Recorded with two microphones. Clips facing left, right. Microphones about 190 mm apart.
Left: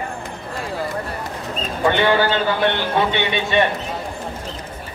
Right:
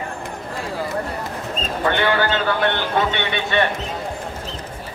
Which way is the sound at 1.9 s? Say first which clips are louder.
Left 3 dB; 15° left (ahead or behind).